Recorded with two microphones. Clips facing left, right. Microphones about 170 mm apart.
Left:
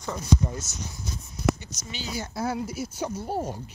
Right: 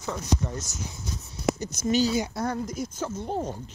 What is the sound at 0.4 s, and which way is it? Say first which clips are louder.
Speech: left 1 dB; 10° left (ahead or behind).